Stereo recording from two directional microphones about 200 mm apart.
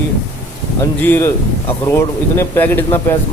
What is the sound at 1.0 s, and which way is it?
A man's voice, 10° left (ahead or behind).